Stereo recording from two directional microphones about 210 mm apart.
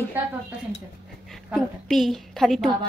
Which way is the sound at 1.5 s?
Centre (ahead or behind).